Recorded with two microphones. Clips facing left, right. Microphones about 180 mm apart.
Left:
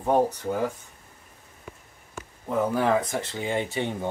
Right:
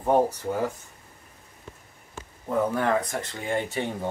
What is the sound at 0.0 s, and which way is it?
Speech, 5° right (ahead or behind).